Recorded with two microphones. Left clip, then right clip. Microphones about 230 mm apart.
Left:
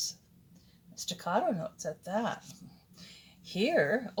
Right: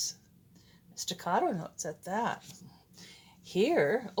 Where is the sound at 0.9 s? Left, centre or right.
Right.